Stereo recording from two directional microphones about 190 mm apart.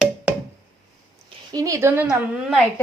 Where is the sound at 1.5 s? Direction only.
15° right (ahead or behind).